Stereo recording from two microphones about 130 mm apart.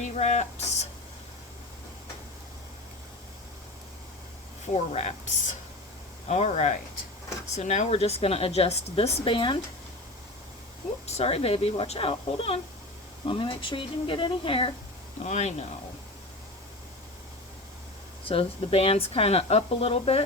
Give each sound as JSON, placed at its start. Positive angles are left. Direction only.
{"t": 0.0, "sound": "a sound", "side_deg": 60}
{"t": 4.7, "sound": "speech", "side_deg": 60}
{"t": 11.0, "sound": "speech", "side_deg": 55}
{"t": 15.2, "sound": "speech", "side_deg": 60}
{"t": 18.3, "sound": "speech", "side_deg": 45}